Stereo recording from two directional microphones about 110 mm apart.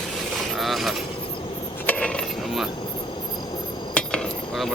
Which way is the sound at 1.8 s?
10° left (ahead or behind).